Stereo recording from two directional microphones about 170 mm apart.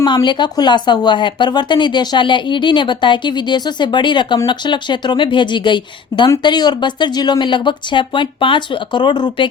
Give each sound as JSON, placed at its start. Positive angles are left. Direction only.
{"t": 0.0, "sound": "speech", "side_deg": 25}